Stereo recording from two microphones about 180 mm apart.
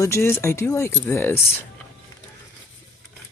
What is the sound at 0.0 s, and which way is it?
Speech, 15° left (ahead or behind).